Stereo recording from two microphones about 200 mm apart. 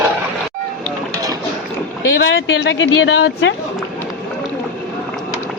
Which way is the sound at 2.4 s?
60° left (ahead or behind).